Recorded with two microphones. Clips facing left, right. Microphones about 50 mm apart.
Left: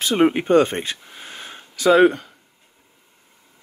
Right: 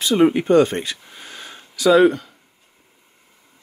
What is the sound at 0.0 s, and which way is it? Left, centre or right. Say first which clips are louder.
Speech: right 2 dB; left.